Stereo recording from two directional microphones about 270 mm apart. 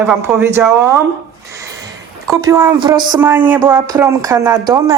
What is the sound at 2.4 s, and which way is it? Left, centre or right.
Speech, centre.